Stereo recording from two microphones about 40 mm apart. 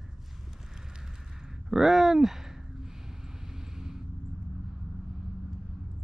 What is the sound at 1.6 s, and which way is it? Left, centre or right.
Speech, centre.